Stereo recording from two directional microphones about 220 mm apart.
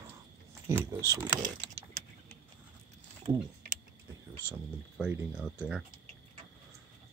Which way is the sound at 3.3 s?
25° right (ahead or behind).